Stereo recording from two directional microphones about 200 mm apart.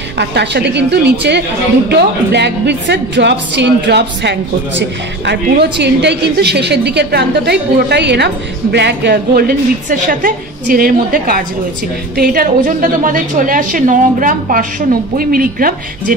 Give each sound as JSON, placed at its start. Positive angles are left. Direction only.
{"t": 0.2, "sound": "a woman's voice", "side_deg": -55}